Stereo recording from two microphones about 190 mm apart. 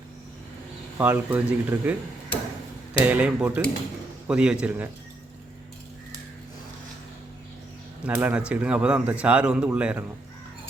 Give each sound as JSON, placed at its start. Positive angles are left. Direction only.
{"t": 0.9, "sound": "a man's voice", "side_deg": -10}
{"t": 3.0, "sound": "a man's voice", "side_deg": -10}
{"t": 8.0, "sound": "a man's voice", "side_deg": -10}